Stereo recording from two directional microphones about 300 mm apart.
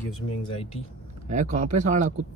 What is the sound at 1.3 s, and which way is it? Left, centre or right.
Speech, right.